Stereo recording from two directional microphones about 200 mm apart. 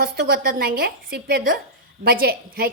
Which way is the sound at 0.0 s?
50° right (ahead or behind).